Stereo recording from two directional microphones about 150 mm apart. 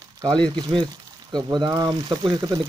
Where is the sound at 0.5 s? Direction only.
30° right (ahead or behind).